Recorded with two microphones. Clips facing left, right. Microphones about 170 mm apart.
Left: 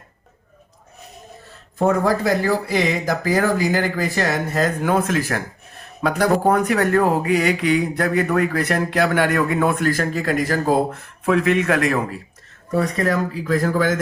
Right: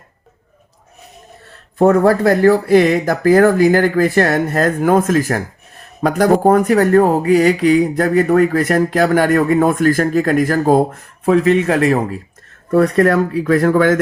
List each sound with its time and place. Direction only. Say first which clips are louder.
1.8 s speech: right 7 dB; 55° right (ahead or behind); by 12.0 s 30° right (ahead or behind)
12.7 s speech: right 8 dB; 60° right (ahead or behind)